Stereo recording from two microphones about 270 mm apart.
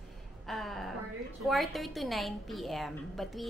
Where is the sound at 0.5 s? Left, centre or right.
Centre.